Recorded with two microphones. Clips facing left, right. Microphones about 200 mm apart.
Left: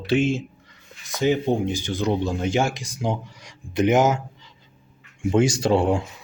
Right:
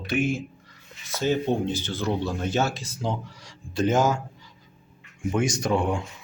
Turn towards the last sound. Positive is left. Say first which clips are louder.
# left 5 dB
turn(degrees=30)  # may be behind; listen again after turning